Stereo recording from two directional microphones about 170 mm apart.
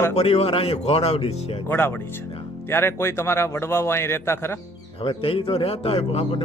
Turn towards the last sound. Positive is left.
turn(degrees=35)  # may be behind; listen again after turning